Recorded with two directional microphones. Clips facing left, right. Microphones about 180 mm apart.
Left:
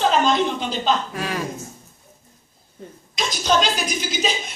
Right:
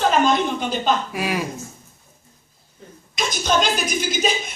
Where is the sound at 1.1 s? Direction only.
10° right (ahead or behind).